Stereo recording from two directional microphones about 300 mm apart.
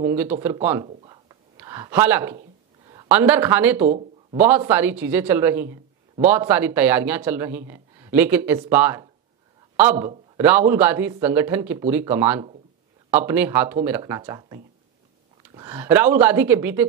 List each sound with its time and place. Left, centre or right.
0.0 s speech: centre
0.8 s a sound: centre
2.9 s speech: centre
3.8 s speech: right
4.4 s speech: centre